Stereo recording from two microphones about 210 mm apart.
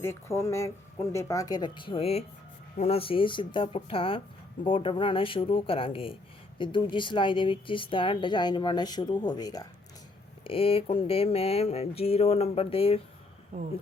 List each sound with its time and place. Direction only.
0.0 s speech: 10° left (ahead or behind); by 13.0 s 25° left (ahead or behind)